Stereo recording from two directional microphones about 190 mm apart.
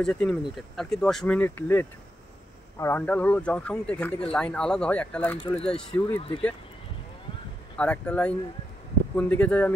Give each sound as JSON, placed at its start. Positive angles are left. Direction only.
{"t": 0.0, "sound": "speech", "side_deg": 5}
{"t": 6.1, "sound": "speech", "side_deg": 30}
{"t": 7.7, "sound": "speech", "side_deg": 5}